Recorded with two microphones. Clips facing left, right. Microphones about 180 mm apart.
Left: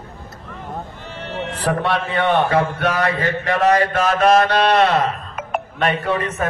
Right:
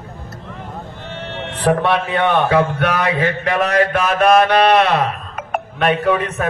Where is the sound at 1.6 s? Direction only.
60° right (ahead or behind).